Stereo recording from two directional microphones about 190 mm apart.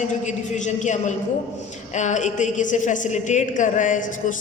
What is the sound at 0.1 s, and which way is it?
A woman's voice, 40° left (ahead or behind).